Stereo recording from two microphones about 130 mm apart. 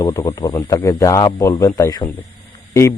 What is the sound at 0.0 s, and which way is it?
A man's voice, 25° left (ahead or behind).